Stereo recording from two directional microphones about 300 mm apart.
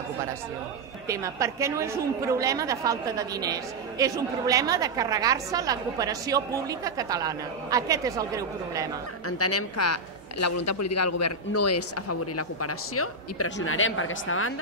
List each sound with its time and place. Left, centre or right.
1.0 s a woman's voice: centre
9.4 s a man's voice: left